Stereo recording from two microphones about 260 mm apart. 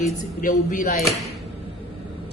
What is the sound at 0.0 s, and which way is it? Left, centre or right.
Speech, left.